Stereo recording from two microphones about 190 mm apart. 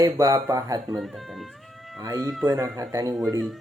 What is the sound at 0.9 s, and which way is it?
Speech, centre (ahead or behind).